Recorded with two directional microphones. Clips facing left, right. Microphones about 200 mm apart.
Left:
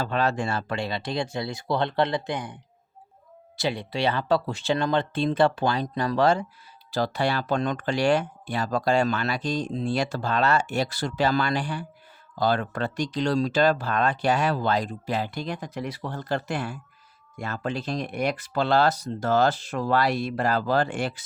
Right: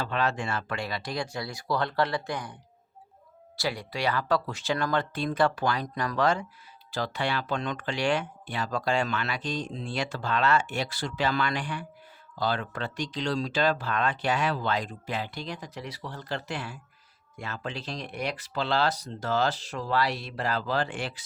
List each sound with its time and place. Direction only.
0.0 s speech: 35° left (ahead or behind); by 2.6 s 20° left (ahead or behind)
3.6 s speech: 25° left (ahead or behind)
12.4 s speech: 45° left (ahead or behind)